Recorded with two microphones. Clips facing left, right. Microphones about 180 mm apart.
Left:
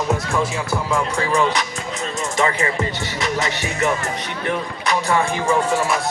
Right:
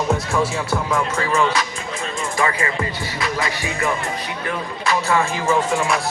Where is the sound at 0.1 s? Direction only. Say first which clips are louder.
Right 1 dB; centre (ahead or behind).